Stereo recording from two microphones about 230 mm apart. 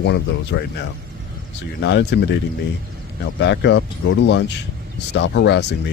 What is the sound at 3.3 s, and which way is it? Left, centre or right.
Speech, left.